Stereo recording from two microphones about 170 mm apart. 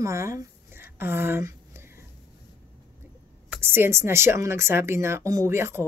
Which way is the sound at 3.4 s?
15° right (ahead or behind).